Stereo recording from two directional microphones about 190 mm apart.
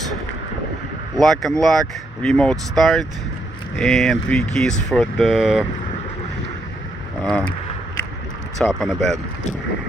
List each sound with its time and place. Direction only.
1.1 s speech: centre (ahead or behind)
7.2 s speech: 5° left (ahead or behind)
8.5 s speech: centre (ahead or behind)